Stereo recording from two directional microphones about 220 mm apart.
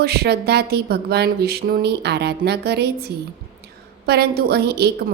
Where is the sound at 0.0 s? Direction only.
45° right (ahead or behind).